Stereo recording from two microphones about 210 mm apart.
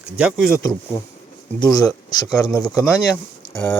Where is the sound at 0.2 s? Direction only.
5° right (ahead or behind).